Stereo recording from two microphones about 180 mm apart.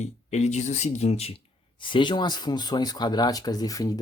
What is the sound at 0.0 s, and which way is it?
Speech, 40° left (ahead or behind).